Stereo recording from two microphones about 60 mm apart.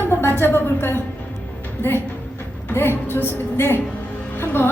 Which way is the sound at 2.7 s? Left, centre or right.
Left.